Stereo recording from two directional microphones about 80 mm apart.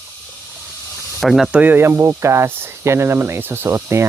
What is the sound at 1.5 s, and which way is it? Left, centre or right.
Speech, right.